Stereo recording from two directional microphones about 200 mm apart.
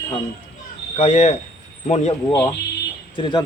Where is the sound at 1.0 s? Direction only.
35° left (ahead or behind).